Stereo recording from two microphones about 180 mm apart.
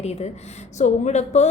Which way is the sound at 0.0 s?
35° left (ahead or behind).